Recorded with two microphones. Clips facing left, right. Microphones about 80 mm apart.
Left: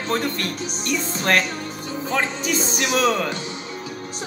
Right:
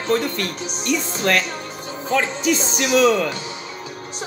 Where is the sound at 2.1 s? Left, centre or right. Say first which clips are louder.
Right 4 dB; left.